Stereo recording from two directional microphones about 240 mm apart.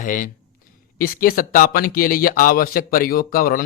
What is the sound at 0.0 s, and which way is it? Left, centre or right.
Speech, left.